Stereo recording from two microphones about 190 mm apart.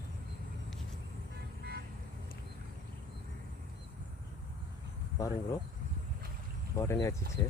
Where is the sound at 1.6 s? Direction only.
55° right (ahead or behind).